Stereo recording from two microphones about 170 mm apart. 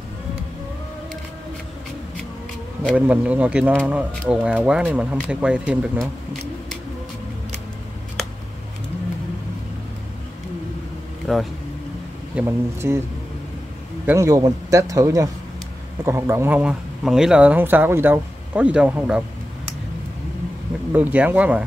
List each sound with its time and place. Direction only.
3.1 s speech: 10° right (ahead or behind)
11.3 s speech: 5° left (ahead or behind)
12.4 s speech: 15° right (ahead or behind)
14.0 s a man's voice: 15° right (ahead or behind)
20.9 s speech: 10° right (ahead or behind)